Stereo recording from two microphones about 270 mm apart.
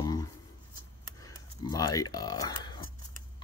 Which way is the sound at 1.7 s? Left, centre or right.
Centre.